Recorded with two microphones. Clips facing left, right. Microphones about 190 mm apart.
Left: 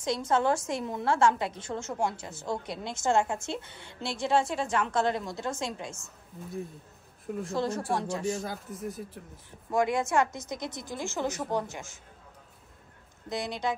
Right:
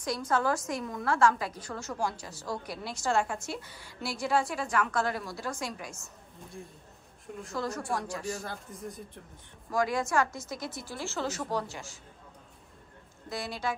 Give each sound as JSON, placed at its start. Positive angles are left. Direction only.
{"t": 0.0, "sound": "a woman's voice", "side_deg": 25}
{"t": 7.4, "sound": "a woman's voice", "side_deg": 30}
{"t": 8.5, "sound": "speech", "side_deg": 5}
{"t": 9.7, "sound": "a woman's voice", "side_deg": 25}
{"t": 13.3, "sound": "a woman's voice", "side_deg": 20}